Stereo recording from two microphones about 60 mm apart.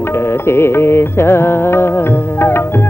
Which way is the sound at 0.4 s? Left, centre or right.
Left.